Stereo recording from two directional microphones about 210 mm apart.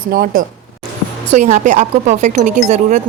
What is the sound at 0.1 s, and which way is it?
Speech, 45° right (ahead or behind).